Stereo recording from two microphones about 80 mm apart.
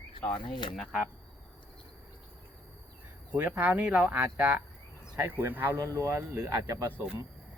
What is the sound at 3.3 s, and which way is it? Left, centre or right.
Speech, centre.